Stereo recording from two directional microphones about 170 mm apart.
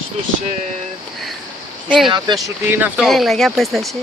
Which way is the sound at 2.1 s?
25° right (ahead or behind).